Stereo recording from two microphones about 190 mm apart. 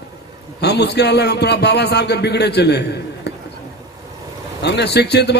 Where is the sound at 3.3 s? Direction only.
60° left (ahead or behind).